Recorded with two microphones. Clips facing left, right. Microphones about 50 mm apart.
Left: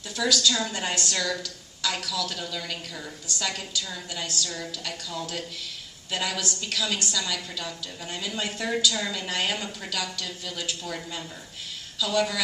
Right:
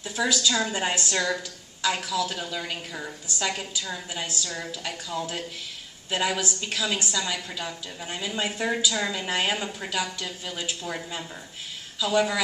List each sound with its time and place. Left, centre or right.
0.2 s a woman's voice: centre